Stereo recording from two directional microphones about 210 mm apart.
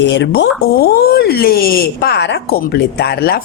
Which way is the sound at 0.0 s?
55° left (ahead or behind).